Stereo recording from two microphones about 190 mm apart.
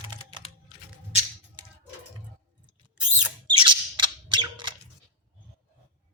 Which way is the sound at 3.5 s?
25° right (ahead or behind).